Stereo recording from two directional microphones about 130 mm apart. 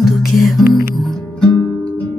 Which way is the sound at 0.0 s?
Centre (ahead or behind).